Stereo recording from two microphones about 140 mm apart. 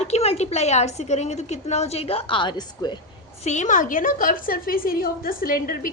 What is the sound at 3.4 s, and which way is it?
A woman's voice, 55° left (ahead or behind).